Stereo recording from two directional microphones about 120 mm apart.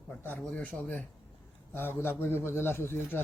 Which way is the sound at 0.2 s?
15° left (ahead or behind).